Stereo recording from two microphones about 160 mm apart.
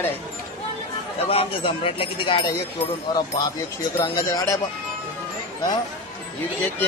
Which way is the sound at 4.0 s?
25° left (ahead or behind).